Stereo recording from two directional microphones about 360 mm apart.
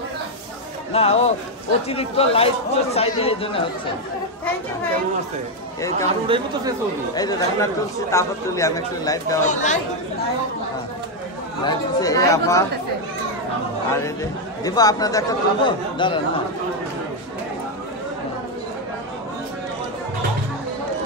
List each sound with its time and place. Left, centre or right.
0.9 s speech: centre
5.8 s speech: centre
6.0 s speech: centre
7.2 s speech: centre
9.4 s speech: centre
11.6 s speech: centre
13.8 s speech: centre